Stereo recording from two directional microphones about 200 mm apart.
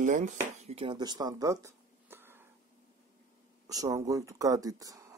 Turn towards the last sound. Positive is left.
turn(degrees=-15)  # may be behind; listen again after turning